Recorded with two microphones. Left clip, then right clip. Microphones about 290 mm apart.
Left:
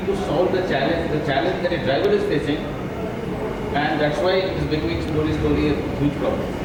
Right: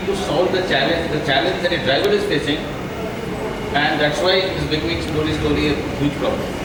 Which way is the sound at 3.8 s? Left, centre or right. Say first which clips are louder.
Right 3 dB; centre.